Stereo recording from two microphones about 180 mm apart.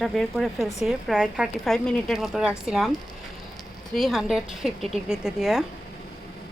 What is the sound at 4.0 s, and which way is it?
A woman's voice, centre (ahead or behind).